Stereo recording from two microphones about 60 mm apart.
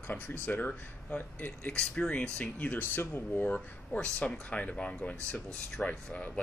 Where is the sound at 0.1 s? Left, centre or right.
Left.